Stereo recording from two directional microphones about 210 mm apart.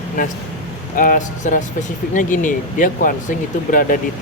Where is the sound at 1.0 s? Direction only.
40° left (ahead or behind).